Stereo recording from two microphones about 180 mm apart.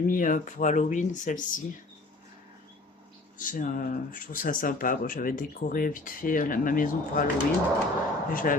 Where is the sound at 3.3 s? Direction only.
50° left (ahead or behind).